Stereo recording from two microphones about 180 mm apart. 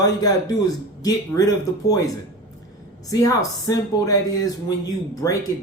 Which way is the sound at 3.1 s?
20° left (ahead or behind).